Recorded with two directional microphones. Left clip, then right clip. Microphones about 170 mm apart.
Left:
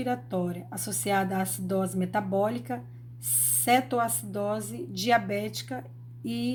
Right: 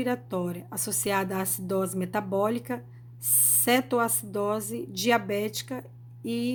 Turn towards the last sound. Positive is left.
turn(degrees=-25)  # may be behind; listen again after turning